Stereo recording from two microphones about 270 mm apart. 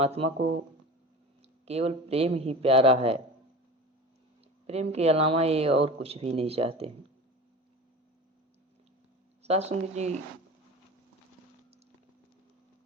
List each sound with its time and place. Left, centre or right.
0.0 s speech: right
1.6 s speech: right
4.6 s speech: right
9.4 s speech: right